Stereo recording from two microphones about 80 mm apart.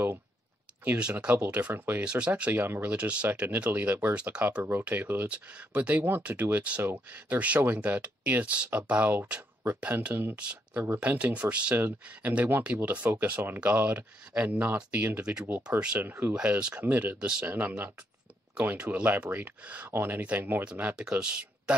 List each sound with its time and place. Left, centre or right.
0.9 s speech: centre
16.3 s speech: centre